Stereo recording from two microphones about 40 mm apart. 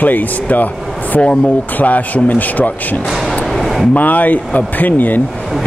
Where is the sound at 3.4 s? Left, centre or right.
Centre.